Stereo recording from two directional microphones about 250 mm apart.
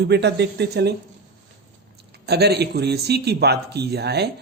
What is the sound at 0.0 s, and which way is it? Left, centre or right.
Speech, right.